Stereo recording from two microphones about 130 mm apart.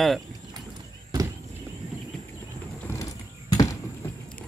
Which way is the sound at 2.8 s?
20° left (ahead or behind).